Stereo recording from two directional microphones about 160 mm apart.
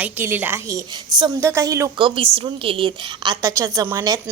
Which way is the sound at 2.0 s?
30° right (ahead or behind).